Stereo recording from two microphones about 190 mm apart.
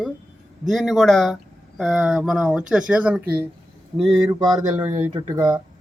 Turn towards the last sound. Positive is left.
turn(degrees=-20)  # may be behind; listen again after turning